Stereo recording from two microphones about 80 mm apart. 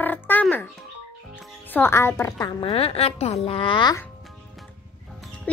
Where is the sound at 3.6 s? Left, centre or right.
Left.